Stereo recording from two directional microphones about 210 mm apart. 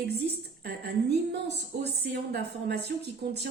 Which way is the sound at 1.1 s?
55° right (ahead or behind).